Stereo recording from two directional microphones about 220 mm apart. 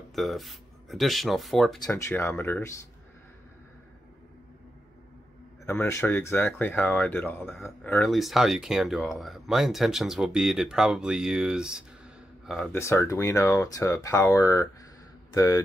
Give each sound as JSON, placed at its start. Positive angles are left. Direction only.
{"t": 0.1, "sound": "speech", "side_deg": 0}
{"t": 1.9, "sound": "speech", "side_deg": 10}
{"t": 5.7, "sound": "speech", "side_deg": 10}
{"t": 12.7, "sound": "speech", "side_deg": 10}